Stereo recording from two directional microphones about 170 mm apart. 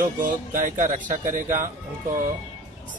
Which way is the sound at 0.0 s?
50° right (ahead or behind).